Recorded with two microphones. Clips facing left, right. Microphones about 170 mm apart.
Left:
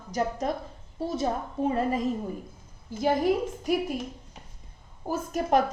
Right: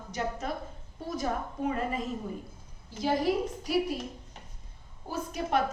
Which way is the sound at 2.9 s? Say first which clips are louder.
Left 5 dB; 50° left (ahead or behind).